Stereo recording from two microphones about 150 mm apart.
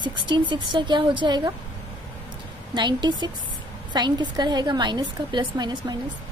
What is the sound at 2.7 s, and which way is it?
A woman's voice, 30° right (ahead or behind).